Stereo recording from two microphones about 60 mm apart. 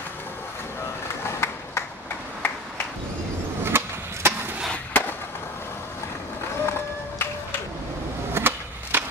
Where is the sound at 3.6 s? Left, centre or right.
Right.